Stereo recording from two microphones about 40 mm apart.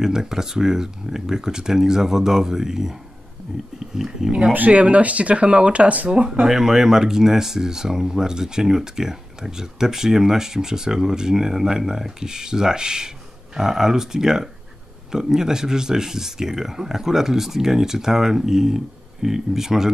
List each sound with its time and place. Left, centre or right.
0.0 s speech: centre
4.5 s speech: right
6.4 s speech: centre